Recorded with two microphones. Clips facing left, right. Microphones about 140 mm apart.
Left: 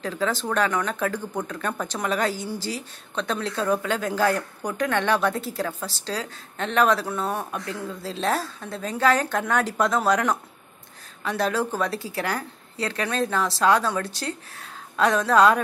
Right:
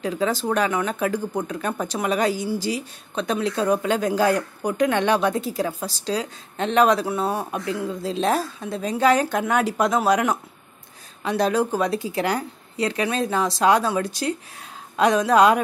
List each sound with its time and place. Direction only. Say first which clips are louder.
0.0 s speech: right 3 dB; 15° right (ahead or behind)